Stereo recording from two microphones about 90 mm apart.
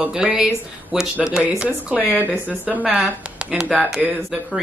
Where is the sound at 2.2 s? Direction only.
15° right (ahead or behind).